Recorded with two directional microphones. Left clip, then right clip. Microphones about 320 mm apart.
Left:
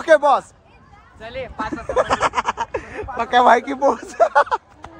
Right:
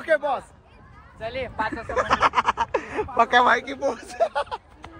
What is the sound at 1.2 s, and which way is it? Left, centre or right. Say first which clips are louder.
Speech: even; right.